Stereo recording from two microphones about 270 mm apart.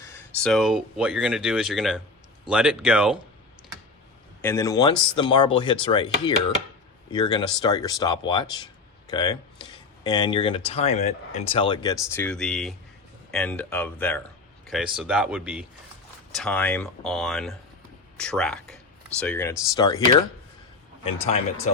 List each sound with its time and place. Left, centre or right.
0.0 s speech: centre
4.4 s speech: centre
11.9 s speech: centre